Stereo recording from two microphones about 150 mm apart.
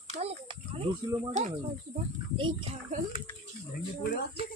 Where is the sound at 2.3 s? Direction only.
35° right (ahead or behind).